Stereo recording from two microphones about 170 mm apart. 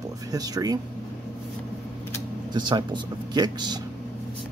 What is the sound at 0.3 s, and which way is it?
Speech, 20° right (ahead or behind).